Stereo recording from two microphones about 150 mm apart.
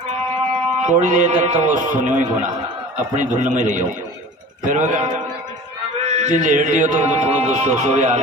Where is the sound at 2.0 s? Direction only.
55° right (ahead or behind).